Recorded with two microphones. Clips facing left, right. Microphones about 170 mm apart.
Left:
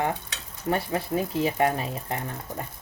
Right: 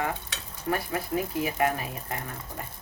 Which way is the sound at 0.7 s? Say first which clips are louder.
Left 3 dB; 25° left (ahead or behind).